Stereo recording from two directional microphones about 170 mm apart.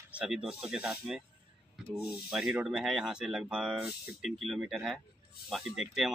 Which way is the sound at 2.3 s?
5° right (ahead or behind).